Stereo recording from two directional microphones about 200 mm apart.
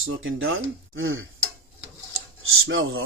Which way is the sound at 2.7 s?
90° right.